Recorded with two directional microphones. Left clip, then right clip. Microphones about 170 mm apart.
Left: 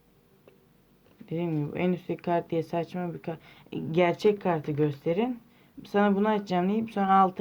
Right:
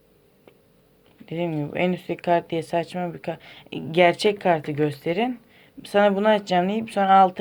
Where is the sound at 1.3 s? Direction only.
20° right (ahead or behind).